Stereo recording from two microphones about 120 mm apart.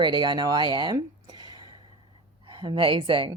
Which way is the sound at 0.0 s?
40° right (ahead or behind).